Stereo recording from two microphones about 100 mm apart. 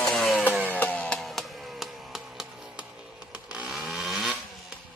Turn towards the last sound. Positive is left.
turn(degrees=-5)  # may be behind; listen again after turning